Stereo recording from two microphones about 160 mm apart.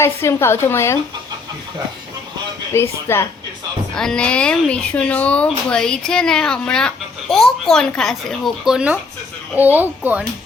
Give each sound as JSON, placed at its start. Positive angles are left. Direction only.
{"t": 0.0, "sound": "a woman's voice", "side_deg": 15}
{"t": 2.7, "sound": "a woman's voice", "side_deg": 15}
{"t": 3.9, "sound": "speech", "side_deg": 5}